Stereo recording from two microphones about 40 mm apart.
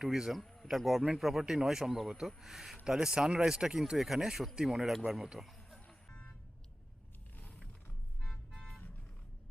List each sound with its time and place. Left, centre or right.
0.0 s speech: centre
0.3 s speech: centre
2.8 s speech: centre
5.5 s music: centre
6.1 s car alarm: left